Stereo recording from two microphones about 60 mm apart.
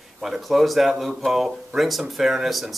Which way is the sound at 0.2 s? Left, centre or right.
Centre.